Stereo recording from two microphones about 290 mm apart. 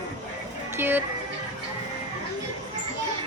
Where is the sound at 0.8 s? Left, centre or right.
Centre.